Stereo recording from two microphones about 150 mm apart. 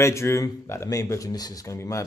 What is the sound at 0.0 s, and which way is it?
Speech, 20° left (ahead or behind).